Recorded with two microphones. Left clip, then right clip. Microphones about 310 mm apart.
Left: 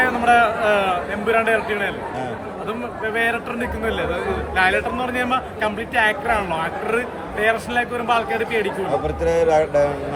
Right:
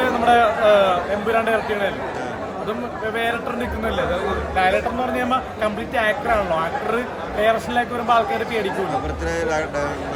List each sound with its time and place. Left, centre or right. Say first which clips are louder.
0.3 s speech: right 2 dB; centre
4.5 s speech: left 1 dB; centre
9.2 s a sound: left 8 dB; centre